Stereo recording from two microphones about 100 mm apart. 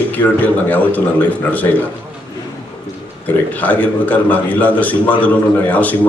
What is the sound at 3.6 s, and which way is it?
A man's voice, 15° left (ahead or behind).